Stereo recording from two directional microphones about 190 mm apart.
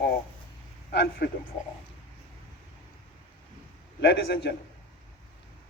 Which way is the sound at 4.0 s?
60° left (ahead or behind).